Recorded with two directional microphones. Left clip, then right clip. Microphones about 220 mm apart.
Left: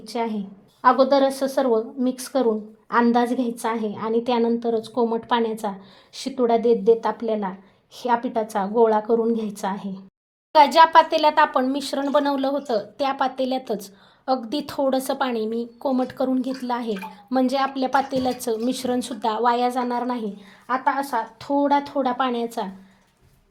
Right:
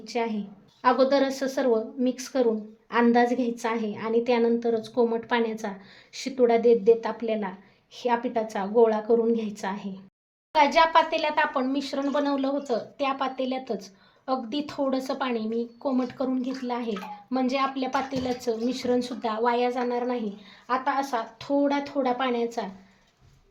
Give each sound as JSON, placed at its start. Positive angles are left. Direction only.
{"t": 0.0, "sound": "a woman's voice", "side_deg": 20}
{"t": 10.5, "sound": "speech", "side_deg": 35}
{"t": 20.7, "sound": "a woman's voice", "side_deg": 20}